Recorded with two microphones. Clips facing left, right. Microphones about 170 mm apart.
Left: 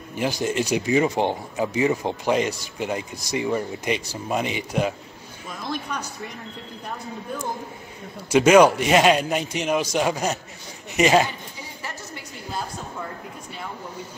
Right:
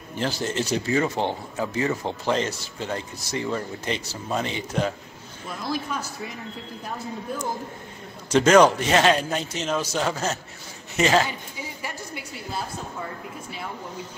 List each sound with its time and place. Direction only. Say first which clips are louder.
0.1 s speech: left 3 dB; 15° left (ahead or behind)
5.7 s speech: right 1 dB; 5° right (ahead or behind)
8.3 s speech: left 2 dB; 10° left (ahead or behind)
11.8 s a sound: left 1 dB; 10° right (ahead or behind)